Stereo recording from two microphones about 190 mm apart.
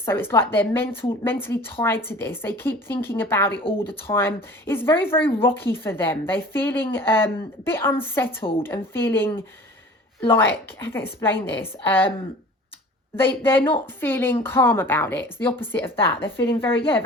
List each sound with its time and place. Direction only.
0.0 s a woman's voice: 10° left (ahead or behind)
8.4 s a woman's voice: 30° left (ahead or behind)
8.6 s a woman's voice: 10° left (ahead or behind)
13.1 s a woman's voice: 10° left (ahead or behind)